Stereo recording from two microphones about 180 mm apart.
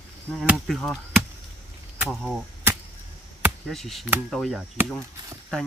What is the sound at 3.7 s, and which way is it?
Speech, centre (ahead or behind).